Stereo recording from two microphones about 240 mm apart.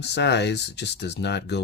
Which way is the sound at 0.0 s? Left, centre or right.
Left.